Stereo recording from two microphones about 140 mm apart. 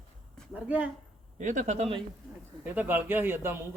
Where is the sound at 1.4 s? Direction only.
65° right (ahead or behind).